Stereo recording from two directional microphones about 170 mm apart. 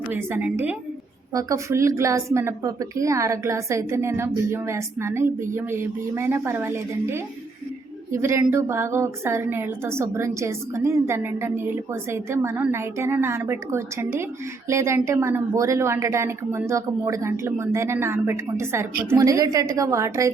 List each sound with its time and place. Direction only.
0.1 s a woman's voice: 10° right (ahead or behind)